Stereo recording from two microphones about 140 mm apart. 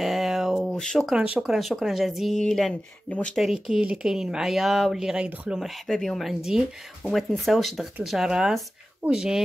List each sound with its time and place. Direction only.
0.0 s speech: centre (ahead or behind)